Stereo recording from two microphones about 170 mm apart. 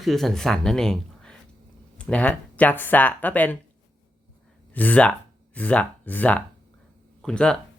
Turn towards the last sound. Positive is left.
turn(degrees=5)  # may be behind; listen again after turning